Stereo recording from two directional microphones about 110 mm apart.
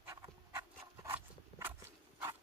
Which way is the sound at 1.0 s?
20° right (ahead or behind).